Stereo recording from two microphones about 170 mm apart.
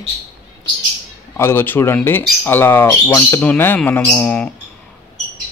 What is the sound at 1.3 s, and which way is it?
Speech, 15° left (ahead or behind).